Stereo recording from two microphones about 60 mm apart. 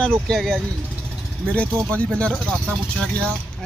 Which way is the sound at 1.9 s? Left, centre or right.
Centre.